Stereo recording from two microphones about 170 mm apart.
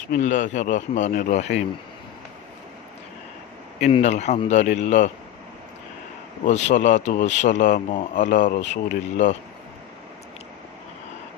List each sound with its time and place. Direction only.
0.1 s speech: 50° left (ahead or behind)
3.9 s a man's voice: 40° left (ahead or behind)
6.4 s speech: 40° left (ahead or behind)